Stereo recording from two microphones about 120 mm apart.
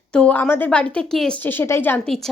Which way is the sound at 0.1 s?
10° left (ahead or behind).